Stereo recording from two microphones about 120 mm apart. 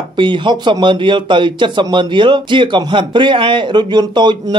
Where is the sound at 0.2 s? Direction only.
40° right (ahead or behind).